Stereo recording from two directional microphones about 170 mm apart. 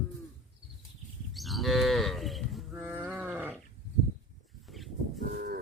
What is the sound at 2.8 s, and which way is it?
Wild animals, 10° right (ahead or behind).